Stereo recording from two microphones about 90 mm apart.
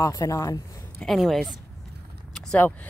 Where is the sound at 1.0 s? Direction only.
Centre (ahead or behind).